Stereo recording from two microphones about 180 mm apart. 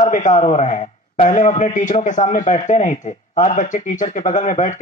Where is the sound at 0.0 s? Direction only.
45° left (ahead or behind).